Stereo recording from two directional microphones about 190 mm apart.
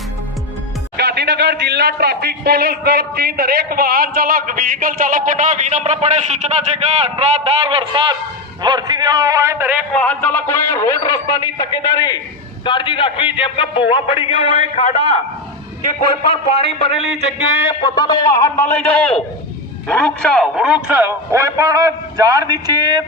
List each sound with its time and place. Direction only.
0.9 s a man's voice: 60° right (ahead or behind); by 9.7 s 15° right (ahead or behind)
9.9 s a man's voice: 5° left (ahead or behind); by 14.5 s 30° left (ahead or behind)
16.0 s a man's voice: 30° left (ahead or behind); by 23.0 s 20° right (ahead or behind)